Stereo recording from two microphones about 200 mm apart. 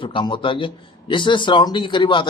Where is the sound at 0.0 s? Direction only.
25° left (ahead or behind).